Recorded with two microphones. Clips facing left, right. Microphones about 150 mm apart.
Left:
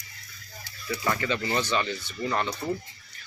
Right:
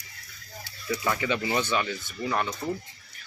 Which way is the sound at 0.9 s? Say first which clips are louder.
Right 1 dB; 10° right (ahead or behind).